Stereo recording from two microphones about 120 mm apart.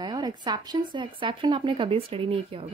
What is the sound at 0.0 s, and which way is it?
Speech, 35° right (ahead or behind).